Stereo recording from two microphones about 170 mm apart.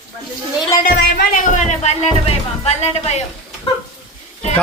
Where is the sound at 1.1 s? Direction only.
55° left (ahead or behind).